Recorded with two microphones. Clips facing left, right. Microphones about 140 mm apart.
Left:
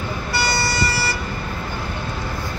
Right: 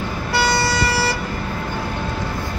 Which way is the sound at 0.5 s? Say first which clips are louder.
Right 2 dB; 90° right.